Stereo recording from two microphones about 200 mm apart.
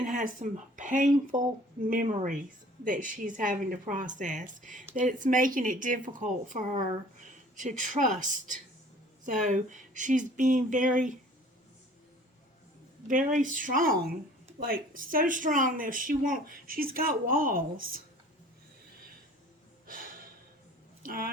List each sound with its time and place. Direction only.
0.0 s a woman's voice: 40° right (ahead or behind)
13.1 s a woman's voice: 40° right (ahead or behind)
19.9 s gasp: 45° right (ahead or behind)
21.0 s speech: 45° right (ahead or behind)